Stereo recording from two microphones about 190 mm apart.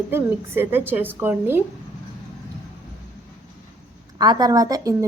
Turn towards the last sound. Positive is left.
turn(degrees=-20)  # may be behind; listen again after turning